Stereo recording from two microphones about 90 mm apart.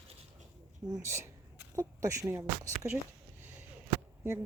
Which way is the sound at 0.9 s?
35° right (ahead or behind).